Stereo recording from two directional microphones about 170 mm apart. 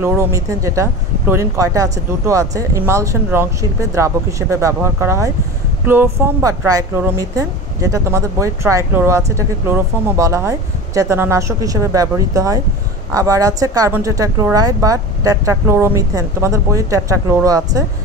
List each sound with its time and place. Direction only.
0.0 s speech: 15° right (ahead or behind)